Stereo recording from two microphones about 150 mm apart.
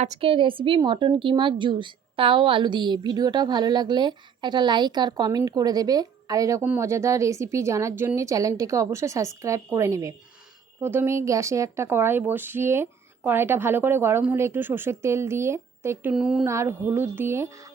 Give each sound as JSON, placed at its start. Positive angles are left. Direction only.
{"t": 0.0, "sound": "a woman's voice", "side_deg": -45}
{"t": 16.1, "sound": "a woman's voice", "side_deg": -5}
{"t": 16.5, "sound": "speech", "side_deg": -20}